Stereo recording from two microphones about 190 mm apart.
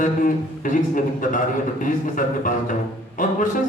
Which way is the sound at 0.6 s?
45° left (ahead or behind).